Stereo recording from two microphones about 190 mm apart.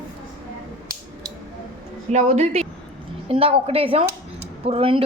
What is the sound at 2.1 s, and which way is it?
Speech, 35° right (ahead or behind).